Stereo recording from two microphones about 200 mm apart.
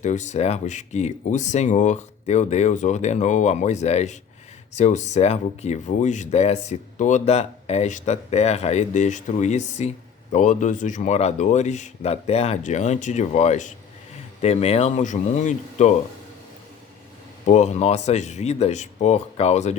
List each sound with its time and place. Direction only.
0.0 s speech: 35° left (ahead or behind)
17.4 s speech: 35° left (ahead or behind)